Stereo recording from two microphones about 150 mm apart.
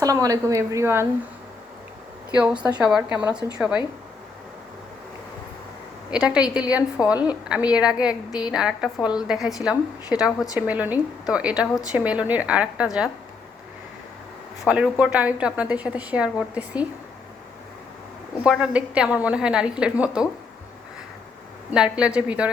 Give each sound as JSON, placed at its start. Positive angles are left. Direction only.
{"t": 0.0, "sound": "a woman's voice", "side_deg": -25}
{"t": 2.3, "sound": "a woman's voice", "side_deg": -5}
{"t": 6.1, "sound": "a woman's voice", "side_deg": -5}
{"t": 8.3, "sound": "a woman's voice", "side_deg": 30}
{"t": 8.5, "sound": "a woman's voice", "side_deg": -5}
{"t": 14.6, "sound": "a woman's voice", "side_deg": -10}
{"t": 18.4, "sound": "a woman's voice", "side_deg": -5}
{"t": 21.7, "sound": "a woman's voice", "side_deg": -5}